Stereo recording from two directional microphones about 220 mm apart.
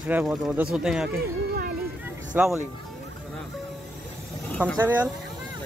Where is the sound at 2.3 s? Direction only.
10° right (ahead or behind).